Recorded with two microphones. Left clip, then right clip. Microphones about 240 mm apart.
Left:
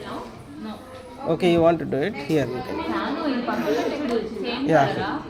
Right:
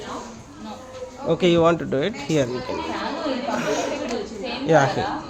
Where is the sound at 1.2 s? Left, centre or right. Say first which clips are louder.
Right 1 dB; right.